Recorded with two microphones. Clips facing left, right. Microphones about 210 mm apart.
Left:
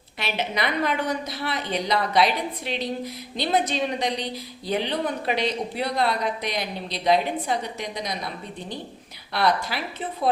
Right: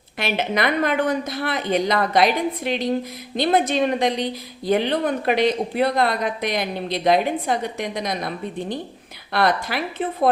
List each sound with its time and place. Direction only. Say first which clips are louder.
0.2 s speech: right 5 dB; 50° right (ahead or behind)
9.3 s a woman's voice: right 3 dB; 55° right (ahead or behind)